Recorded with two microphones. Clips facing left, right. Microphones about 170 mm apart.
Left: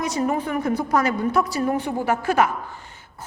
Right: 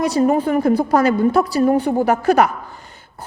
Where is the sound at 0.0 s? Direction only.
35° right (ahead or behind).